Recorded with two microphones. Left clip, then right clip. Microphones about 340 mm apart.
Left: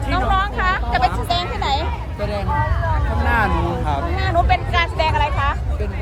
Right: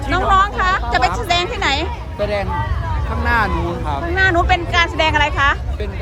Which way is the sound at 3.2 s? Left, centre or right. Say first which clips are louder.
Right 2 dB; centre.